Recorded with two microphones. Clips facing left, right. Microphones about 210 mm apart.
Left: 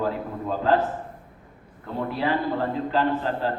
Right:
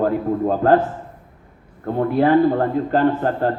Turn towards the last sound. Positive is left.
turn(degrees=-50)  # may be behind; listen again after turning